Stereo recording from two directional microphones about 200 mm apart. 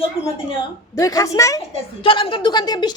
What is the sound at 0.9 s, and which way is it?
A woman's voice, 15° left (ahead or behind).